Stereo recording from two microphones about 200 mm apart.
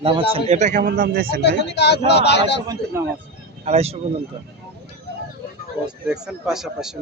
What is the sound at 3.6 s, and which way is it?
Speech, 30° right (ahead or behind).